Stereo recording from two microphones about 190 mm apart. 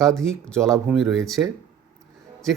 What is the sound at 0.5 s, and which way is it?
Speech, 15° right (ahead or behind).